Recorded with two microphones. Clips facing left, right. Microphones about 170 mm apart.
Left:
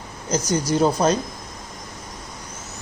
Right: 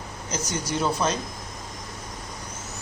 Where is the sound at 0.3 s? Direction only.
35° left (ahead or behind).